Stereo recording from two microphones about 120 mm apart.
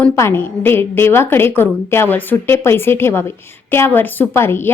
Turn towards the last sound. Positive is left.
turn(degrees=20)  # may be behind; listen again after turning